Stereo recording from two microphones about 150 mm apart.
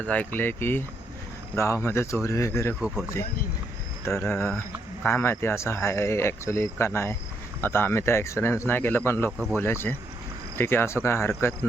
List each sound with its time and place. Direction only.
0.0 s speech: 10° left (ahead or behind)
4.0 s speech: 15° left (ahead or behind)